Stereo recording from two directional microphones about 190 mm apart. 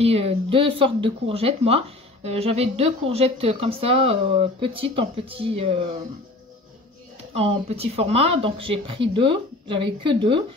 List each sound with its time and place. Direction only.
0.0 s speech: 30° right (ahead or behind)
7.3 s speech: 30° right (ahead or behind)